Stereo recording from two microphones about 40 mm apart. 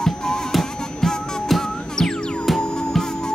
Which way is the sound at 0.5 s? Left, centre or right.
Centre.